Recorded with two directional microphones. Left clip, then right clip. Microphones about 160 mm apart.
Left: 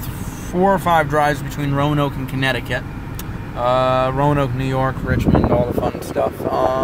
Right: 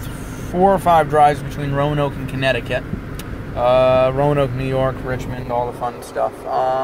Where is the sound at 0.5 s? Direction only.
10° left (ahead or behind).